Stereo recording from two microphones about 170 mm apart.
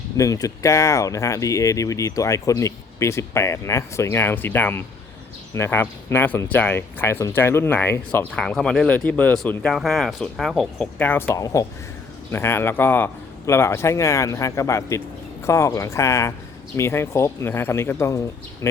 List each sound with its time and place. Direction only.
0.2 s speech: 20° left (ahead or behind)